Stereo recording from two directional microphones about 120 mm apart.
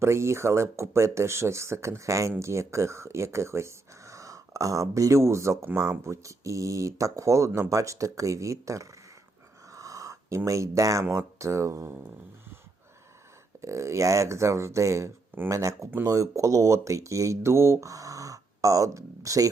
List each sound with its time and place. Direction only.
0.0 s speech: 25° right (ahead or behind)
9.7 s a sound: 30° right (ahead or behind)
11.0 s speech: 20° right (ahead or behind)
13.6 s speech: 25° right (ahead or behind)